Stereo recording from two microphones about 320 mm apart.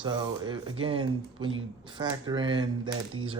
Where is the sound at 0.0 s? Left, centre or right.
Centre.